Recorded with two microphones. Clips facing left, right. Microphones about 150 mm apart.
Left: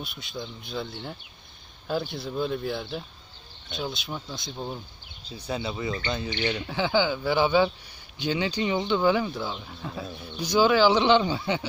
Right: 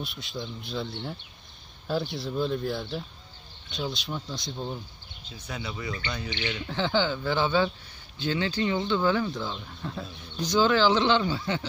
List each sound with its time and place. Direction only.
0.0 s speech: centre (ahead or behind)
5.2 s speech: 30° left (ahead or behind)
6.3 s speech: 40° left (ahead or behind)
6.7 s speech: 10° left (ahead or behind)